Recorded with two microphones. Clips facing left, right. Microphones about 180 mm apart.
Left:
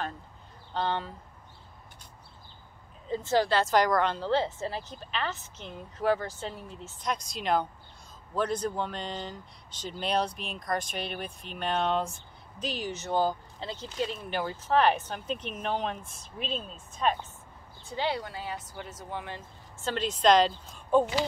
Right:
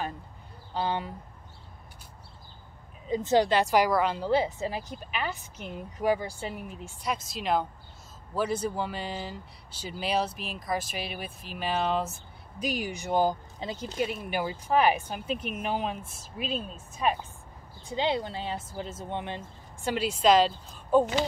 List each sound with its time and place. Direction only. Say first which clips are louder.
0.7 s a woman's voice: right 1 dB; 10° right (ahead or behind)
3.1 s a woman's voice: right 3 dB; 20° right (ahead or behind)
17.9 s speech: right 3 dB; 20° right (ahead or behind); by 21.1 s 5° right (ahead or behind)